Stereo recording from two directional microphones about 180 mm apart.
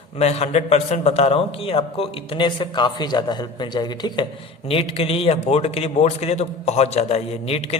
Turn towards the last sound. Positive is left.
turn(degrees=35)  # may be behind; listen again after turning